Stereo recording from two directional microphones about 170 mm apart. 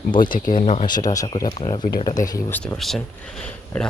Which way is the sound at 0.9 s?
20° left (ahead or behind).